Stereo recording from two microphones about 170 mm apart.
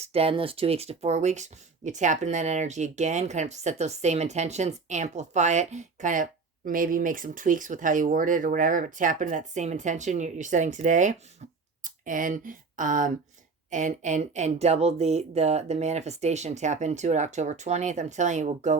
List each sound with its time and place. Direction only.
0.0 s speech: 35° right (ahead or behind)